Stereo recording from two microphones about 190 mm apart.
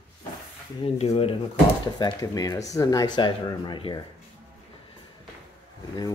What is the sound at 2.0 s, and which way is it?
Speech, 20° left (ahead or behind).